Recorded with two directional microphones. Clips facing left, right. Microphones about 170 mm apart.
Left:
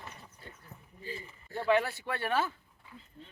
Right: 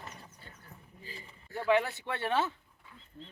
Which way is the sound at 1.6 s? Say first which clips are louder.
Even; 15° right (ahead or behind).